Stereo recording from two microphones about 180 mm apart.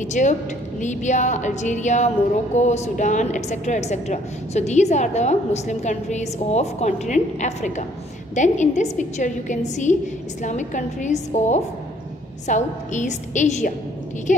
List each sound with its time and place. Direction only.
0.0 s a woman's voice: 40° left (ahead or behind)